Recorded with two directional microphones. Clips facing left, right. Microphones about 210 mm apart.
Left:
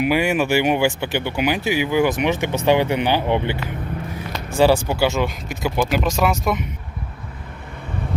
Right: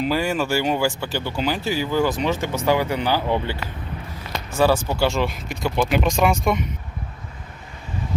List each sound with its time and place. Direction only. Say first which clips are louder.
0.0 s speech: left 3 dB; 15° left (ahead or behind)
4.7 s speech: left 2 dB; 5° left (ahead or behind)